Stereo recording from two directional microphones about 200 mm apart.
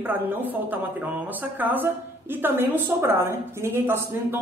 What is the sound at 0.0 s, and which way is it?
A woman's voice, 10° right (ahead or behind).